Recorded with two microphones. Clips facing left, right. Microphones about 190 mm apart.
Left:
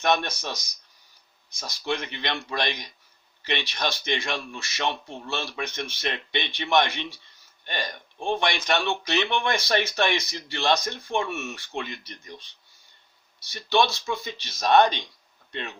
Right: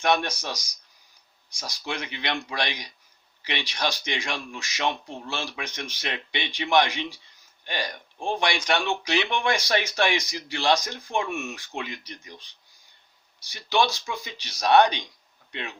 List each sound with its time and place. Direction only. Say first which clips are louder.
0.0 s speech: even; 10° right (ahead or behind)
1.5 s speech: left 3 dB; 10° right (ahead or behind)
13.5 s speech: left 1 dB; 15° right (ahead or behind)